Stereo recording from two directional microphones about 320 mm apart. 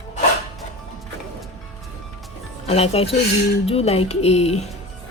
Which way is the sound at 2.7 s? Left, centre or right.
Centre.